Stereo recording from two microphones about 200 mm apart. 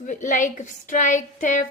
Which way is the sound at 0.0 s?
40° left (ahead or behind).